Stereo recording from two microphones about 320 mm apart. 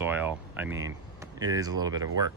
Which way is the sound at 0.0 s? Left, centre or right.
Centre.